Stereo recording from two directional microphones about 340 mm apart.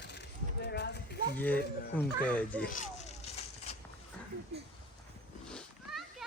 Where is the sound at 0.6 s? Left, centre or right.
Left.